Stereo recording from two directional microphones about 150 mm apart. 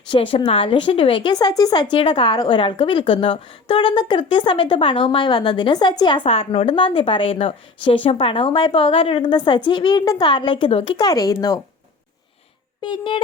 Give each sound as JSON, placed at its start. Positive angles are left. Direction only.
{"t": 0.1, "sound": "a woman's voice", "side_deg": 35}
{"t": 10.9, "sound": "speech", "side_deg": 25}
{"t": 12.8, "sound": "a woman's voice", "side_deg": 30}